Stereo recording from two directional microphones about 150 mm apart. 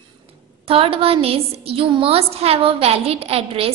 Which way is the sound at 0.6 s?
40° right (ahead or behind).